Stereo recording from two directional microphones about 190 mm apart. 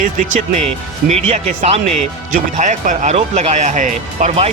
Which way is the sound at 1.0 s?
35° right (ahead or behind).